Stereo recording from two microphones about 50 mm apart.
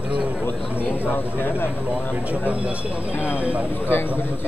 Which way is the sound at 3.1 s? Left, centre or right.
Left.